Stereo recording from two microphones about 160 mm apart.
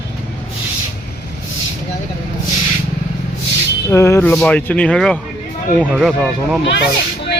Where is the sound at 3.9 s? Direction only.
15° left (ahead or behind).